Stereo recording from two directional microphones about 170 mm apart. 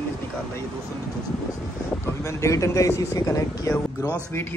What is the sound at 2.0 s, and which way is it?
A man's voice, 15° left (ahead or behind).